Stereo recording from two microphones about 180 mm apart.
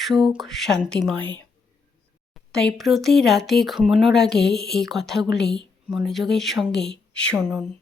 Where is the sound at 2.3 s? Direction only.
5° left (ahead or behind).